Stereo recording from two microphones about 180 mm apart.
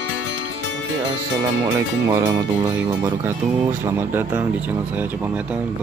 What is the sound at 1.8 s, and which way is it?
Speech, 20° right (ahead or behind).